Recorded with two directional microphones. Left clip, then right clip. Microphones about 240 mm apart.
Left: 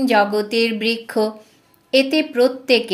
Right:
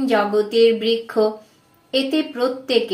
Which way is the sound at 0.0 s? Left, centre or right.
Left.